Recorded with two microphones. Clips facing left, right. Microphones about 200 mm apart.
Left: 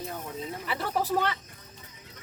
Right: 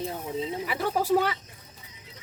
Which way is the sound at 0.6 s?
10° right (ahead or behind).